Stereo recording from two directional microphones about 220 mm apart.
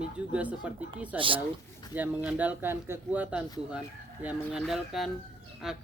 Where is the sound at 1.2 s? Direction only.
25° right (ahead or behind).